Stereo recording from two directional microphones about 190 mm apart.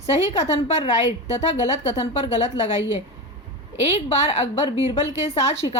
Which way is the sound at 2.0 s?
35° left (ahead or behind).